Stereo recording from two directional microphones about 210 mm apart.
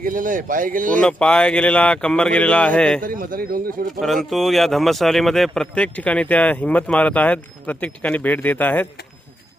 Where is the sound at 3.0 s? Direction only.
40° right (ahead or behind).